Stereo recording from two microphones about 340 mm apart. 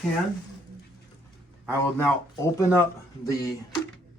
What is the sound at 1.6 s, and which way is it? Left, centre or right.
Speech, centre.